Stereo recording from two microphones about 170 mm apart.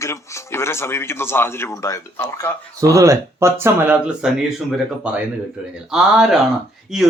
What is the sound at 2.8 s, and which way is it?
Speech, 20° right (ahead or behind).